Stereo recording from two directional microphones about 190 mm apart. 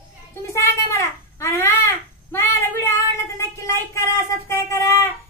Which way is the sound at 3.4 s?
15° left (ahead or behind).